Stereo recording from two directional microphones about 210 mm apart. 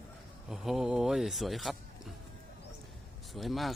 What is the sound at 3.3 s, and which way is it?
Speech, centre (ahead or behind).